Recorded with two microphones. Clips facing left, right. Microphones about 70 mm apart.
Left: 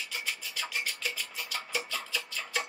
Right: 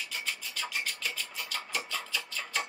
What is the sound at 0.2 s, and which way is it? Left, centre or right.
Rub, centre.